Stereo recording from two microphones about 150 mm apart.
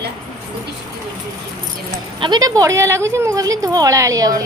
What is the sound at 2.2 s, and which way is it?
A woman's voice, 25° right (ahead or behind).